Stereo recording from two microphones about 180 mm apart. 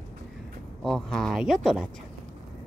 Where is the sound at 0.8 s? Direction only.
Centre (ahead or behind).